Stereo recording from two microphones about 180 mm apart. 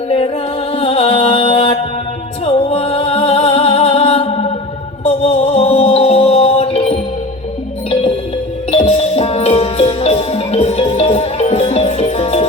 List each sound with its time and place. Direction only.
0.7 s music: 35° left (ahead or behind)
8.7 s music: 35° left (ahead or behind)